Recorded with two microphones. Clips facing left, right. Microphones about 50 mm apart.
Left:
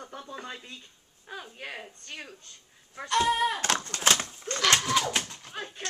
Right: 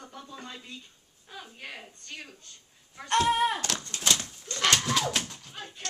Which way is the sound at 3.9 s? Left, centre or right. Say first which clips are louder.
Left 1 dB; left.